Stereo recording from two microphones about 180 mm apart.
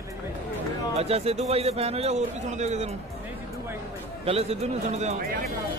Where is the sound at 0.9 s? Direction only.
35° right (ahead or behind).